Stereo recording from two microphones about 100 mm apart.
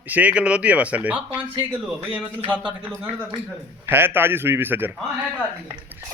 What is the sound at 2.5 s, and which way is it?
A man's voice, 20° right (ahead or behind).